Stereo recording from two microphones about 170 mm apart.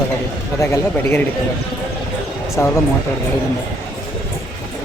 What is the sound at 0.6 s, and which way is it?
Speech, 20° left (ahead or behind).